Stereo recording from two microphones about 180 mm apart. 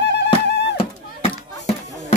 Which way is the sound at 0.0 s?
70° left (ahead or behind).